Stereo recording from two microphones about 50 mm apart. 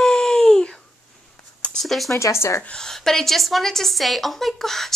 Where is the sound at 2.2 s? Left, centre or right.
Left.